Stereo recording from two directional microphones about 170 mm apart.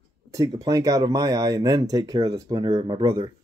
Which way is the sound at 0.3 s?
20° right (ahead or behind).